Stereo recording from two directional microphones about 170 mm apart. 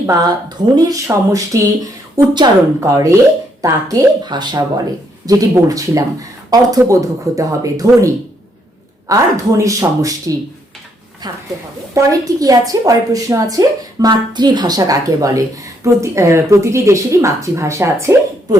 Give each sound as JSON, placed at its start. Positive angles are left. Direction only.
{"t": 0.0, "sound": "a woman's voice", "side_deg": -20}